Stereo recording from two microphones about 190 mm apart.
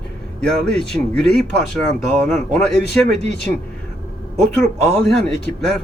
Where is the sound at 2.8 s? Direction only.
60° left (ahead or behind).